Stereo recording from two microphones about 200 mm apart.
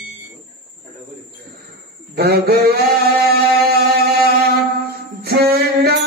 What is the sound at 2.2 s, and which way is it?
Mantra, 50° right (ahead or behind).